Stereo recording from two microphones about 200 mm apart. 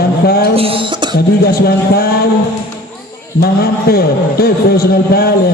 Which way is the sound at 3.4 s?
50° left (ahead or behind).